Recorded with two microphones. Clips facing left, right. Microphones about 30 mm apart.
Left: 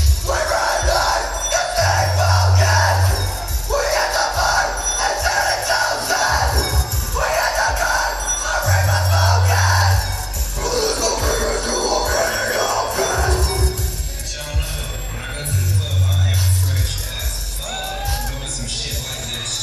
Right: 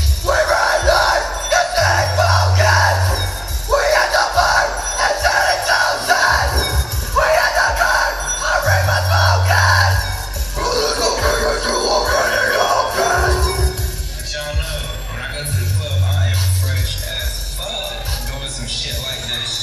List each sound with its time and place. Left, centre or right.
0.3 s crowd: right
1.3 s music: right
3.7 s crowd: right
4.7 s music: right
8.1 s music: centre
8.4 s music: right
10.6 s a sound: right